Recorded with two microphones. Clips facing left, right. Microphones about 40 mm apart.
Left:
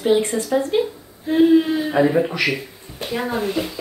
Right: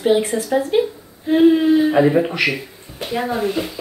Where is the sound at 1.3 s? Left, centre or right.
Right.